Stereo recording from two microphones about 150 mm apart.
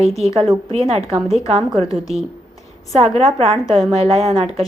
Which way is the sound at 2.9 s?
45° right (ahead or behind).